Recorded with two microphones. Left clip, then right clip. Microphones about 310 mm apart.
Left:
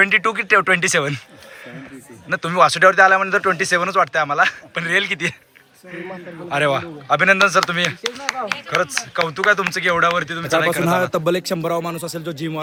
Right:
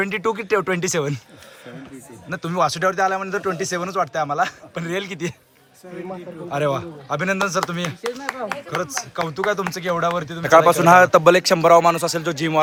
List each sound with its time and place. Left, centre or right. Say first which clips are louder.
0.0 s a man's voice: left 7 dB; centre
2.3 s a man's voice: left 6 dB; centre
6.5 s a man's voice: left 4 dB; centre
8.3 s speech: left 8 dB; right
9.1 s a man's voice: left 5 dB; centre